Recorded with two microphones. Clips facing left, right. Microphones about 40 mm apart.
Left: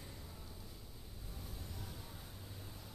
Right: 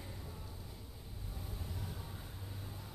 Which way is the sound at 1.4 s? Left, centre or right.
Centre.